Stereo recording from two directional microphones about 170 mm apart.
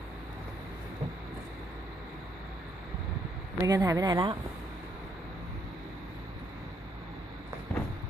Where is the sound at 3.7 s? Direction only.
20° right (ahead or behind).